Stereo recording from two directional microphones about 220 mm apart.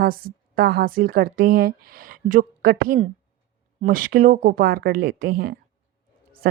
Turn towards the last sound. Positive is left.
turn(degrees=-45)  # may be behind; listen again after turning